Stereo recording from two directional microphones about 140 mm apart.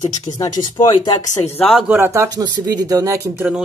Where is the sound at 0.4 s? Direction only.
30° left (ahead or behind).